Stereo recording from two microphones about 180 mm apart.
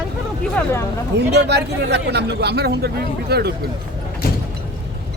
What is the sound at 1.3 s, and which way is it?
Speech, 70° right (ahead or behind).